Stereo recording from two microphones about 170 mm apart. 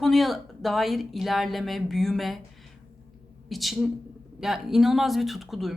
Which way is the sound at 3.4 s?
Centre (ahead or behind).